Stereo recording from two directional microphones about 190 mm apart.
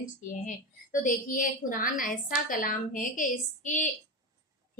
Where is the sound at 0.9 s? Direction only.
45° left (ahead or behind).